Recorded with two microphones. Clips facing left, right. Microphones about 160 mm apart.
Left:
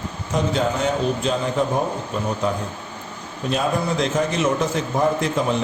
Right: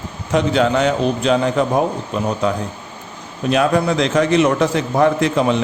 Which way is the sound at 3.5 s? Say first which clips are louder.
Right 6 dB; 80° right.